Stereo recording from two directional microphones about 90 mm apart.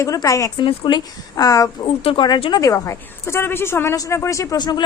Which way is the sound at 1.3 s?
40° left (ahead or behind).